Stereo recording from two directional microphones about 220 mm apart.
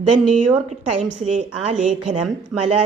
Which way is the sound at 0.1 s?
30° right (ahead or behind).